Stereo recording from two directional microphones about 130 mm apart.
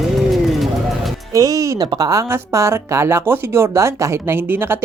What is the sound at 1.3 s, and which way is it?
Speech, 25° right (ahead or behind).